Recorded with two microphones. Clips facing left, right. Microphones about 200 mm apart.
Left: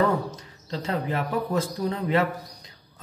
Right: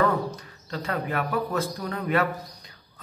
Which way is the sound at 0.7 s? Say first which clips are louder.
Left 1 dB; 25° left (ahead or behind).